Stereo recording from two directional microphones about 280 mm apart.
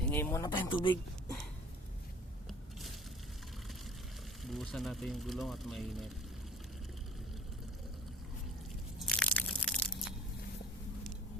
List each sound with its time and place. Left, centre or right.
0.1 s speech: centre
4.4 s speech: centre
9.0 s crushing: centre